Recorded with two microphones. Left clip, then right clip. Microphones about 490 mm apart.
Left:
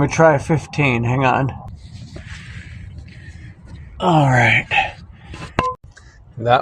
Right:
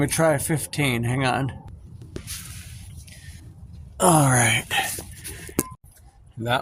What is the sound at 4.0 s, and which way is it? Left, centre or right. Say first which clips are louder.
Speech: left 4 dB; right.